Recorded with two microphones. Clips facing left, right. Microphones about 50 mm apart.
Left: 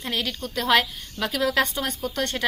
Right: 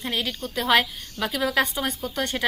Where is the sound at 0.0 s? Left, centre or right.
Centre.